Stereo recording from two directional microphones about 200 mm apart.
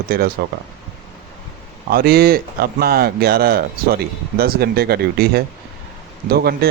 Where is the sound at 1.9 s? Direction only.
50° right (ahead or behind).